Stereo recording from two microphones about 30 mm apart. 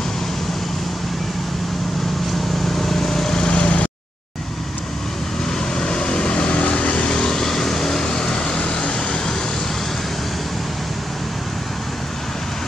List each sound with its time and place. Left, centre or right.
2.7 s vehicle: centre
3.3 s vehicle: left
5.8 s vehicle: left
7.1 s vehicle: left
8.0 s vehicle: left